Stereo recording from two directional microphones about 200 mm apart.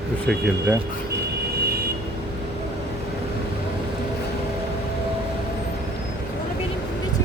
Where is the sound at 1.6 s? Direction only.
50° right (ahead or behind).